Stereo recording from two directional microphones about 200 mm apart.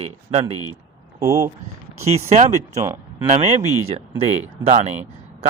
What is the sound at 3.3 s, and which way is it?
Speech, 35° right (ahead or behind).